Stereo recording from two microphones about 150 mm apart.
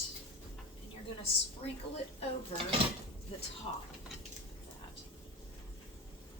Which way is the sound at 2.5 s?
40° left (ahead or behind).